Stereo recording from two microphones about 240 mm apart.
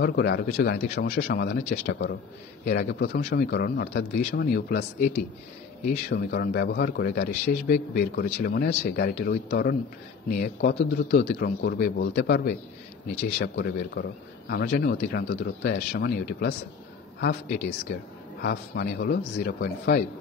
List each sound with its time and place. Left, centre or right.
0.0 s a man's voice: left